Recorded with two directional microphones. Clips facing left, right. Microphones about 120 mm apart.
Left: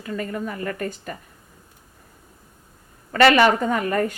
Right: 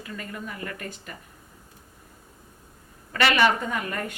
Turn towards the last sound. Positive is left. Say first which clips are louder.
# left 8 dB
turn(degrees=40)  # may be behind; listen again after turning